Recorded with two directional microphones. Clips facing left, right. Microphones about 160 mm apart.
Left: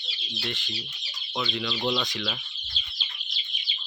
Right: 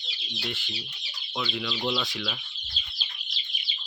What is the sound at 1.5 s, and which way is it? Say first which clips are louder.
Speech: left 2 dB; centre (ahead or behind).